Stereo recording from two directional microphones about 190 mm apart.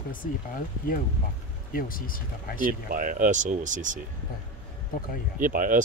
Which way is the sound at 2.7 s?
45° right (ahead or behind).